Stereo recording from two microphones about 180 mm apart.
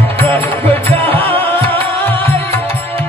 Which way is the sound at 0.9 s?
10° left (ahead or behind).